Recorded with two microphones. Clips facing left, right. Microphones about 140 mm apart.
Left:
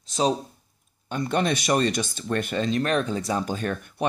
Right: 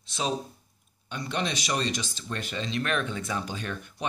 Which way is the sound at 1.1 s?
50° left (ahead or behind).